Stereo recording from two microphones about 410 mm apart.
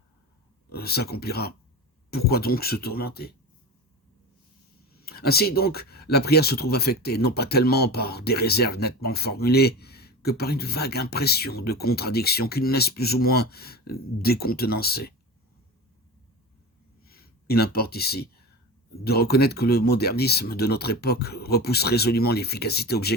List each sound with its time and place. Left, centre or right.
0.7 s speech: left
4.9 s speech: left
17.0 s a sound: left
19.0 s speech: left